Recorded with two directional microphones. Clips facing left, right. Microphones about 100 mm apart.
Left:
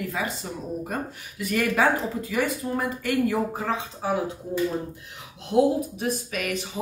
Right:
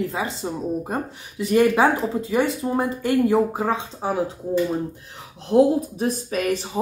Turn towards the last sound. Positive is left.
turn(degrees=-35)  # may be behind; listen again after turning